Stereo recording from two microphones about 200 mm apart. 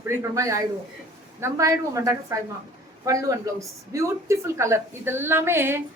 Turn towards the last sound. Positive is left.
turn(degrees=-10)  # may be behind; listen again after turning